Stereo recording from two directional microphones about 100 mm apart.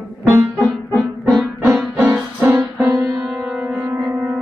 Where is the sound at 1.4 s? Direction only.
5° right (ahead or behind).